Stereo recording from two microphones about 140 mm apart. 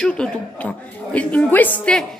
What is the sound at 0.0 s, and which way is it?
A woman's voice, 5° left (ahead or behind).